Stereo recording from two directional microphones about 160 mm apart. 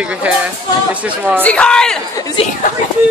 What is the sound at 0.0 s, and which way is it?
Speech, 10° right (ahead or behind).